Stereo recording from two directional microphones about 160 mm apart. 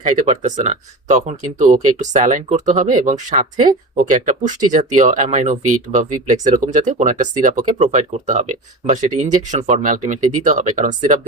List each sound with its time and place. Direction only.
0.4 s speech: 50° right (ahead or behind)